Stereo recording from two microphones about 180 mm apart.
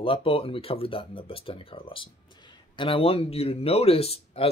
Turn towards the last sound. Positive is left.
turn(degrees=35)  # may be behind; listen again after turning